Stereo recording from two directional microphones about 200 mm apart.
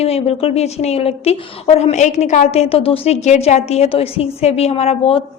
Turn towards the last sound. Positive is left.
turn(degrees=30)  # may be behind; listen again after turning